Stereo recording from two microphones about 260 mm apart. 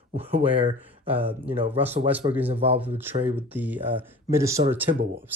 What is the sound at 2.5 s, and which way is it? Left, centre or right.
Speech, right.